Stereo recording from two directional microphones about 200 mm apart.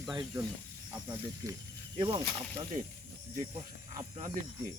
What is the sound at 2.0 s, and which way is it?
Cricket, 25° right (ahead or behind).